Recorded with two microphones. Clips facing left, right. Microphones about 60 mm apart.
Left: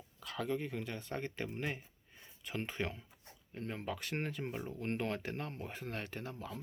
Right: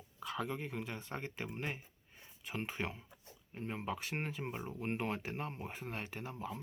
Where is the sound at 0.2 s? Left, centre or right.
Centre.